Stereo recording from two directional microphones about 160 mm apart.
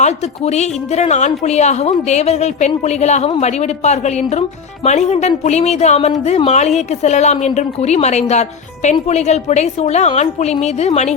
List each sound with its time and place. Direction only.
0.0 s speech: 45° left (ahead or behind)